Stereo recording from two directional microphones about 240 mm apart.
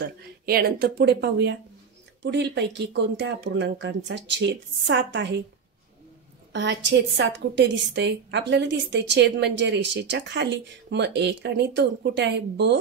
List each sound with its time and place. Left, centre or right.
0.0 s a woman's voice: right
6.5 s a woman's voice: right